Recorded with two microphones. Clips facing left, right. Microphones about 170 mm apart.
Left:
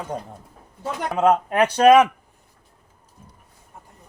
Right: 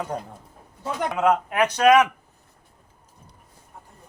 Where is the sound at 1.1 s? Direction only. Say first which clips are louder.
Left 4 dB; 35° left (ahead or behind).